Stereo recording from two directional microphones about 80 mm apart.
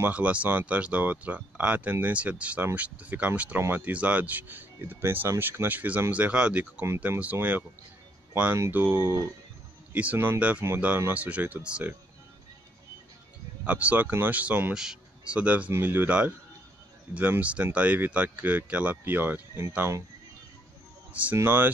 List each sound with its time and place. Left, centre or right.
0.0 s speech: centre
8.7 s speech: right
9.9 s speech: right
10.6 s speech: right
11.1 s speech: centre
13.7 s speech: centre
14.7 s speech: centre
21.1 s speech: centre